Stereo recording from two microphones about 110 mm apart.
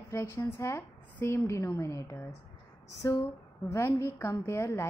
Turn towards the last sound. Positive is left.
turn(degrees=25)  # may be behind; listen again after turning